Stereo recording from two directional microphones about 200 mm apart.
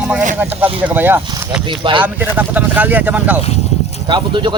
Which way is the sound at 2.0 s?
10° right (ahead or behind).